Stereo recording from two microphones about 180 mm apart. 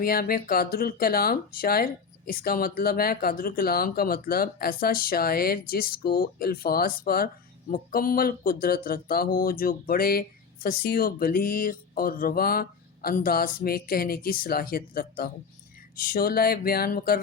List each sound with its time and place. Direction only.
0.0 s speech: 55° left (ahead or behind)